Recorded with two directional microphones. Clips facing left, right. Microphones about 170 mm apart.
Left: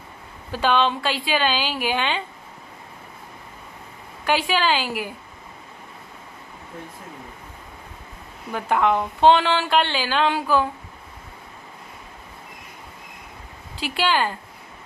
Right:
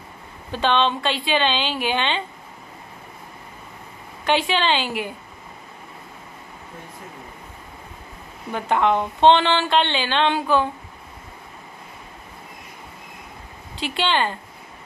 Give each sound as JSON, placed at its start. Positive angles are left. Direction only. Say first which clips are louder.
{"t": 0.5, "sound": "a woman's voice", "louder": "even", "side_deg": 5}
{"t": 4.3, "sound": "a woman's voice", "louder": "right 1 dB", "side_deg": 5}
{"t": 8.5, "sound": "a woman's voice", "louder": "right 1 dB", "side_deg": 5}
{"t": 13.7, "sound": "a woman's voice", "louder": "even", "side_deg": 5}